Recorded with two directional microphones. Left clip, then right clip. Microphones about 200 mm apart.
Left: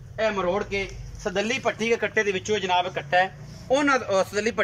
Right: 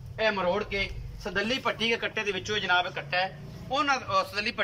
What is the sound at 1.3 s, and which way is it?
A man's voice, 25° left (ahead or behind).